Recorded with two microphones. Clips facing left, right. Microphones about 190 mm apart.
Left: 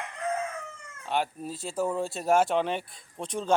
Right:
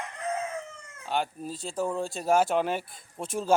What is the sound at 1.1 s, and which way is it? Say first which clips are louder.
Speech: left 1 dB; centre (ahead or behind).